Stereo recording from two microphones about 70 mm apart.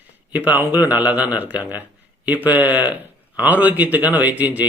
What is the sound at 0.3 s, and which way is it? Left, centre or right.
Speech, right.